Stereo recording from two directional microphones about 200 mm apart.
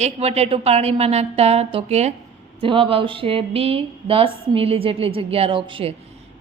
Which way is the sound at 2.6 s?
25° right (ahead or behind).